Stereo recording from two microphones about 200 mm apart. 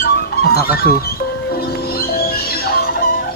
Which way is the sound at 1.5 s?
50° left (ahead or behind).